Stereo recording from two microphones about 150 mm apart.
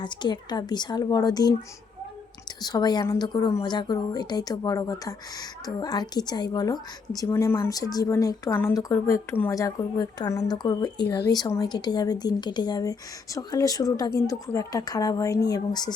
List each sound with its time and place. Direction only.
0.0 s a woman's voice: 30° left (ahead or behind)
2.6 s a woman's voice: 25° left (ahead or behind)